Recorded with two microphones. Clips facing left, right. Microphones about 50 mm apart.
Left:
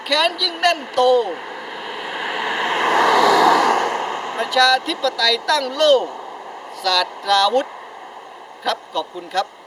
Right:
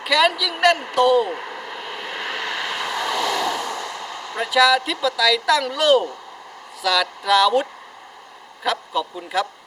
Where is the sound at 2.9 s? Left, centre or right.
Left.